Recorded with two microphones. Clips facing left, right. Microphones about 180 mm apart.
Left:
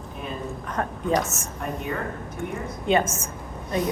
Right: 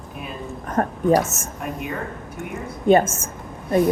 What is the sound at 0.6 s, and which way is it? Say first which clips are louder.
Speech: right 8 dB; 45° right (ahead or behind).